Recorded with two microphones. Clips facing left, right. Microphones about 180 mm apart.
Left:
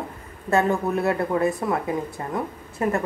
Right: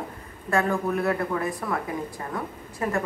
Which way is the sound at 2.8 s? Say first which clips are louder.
Left 5 dB; 25° left (ahead or behind).